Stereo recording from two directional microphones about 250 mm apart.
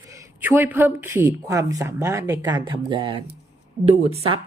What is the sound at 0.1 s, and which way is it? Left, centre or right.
A woman's voice, centre.